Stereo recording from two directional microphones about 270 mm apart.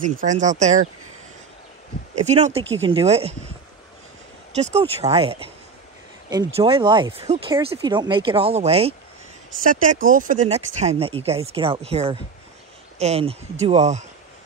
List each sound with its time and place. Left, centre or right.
0.2 s speech: right
2.2 s speech: right
4.6 s speech: right